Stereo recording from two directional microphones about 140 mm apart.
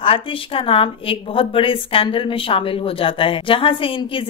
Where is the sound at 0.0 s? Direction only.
40° left (ahead or behind).